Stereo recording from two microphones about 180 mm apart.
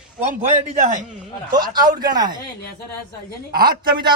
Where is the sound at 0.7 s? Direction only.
45° right (ahead or behind).